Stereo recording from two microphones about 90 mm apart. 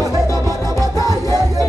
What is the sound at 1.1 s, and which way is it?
Music, 45° right (ahead or behind).